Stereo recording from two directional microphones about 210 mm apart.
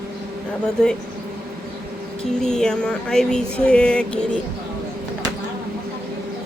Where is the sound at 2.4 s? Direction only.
5° left (ahead or behind).